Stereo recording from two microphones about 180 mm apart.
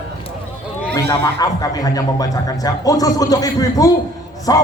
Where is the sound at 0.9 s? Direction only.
20° left (ahead or behind).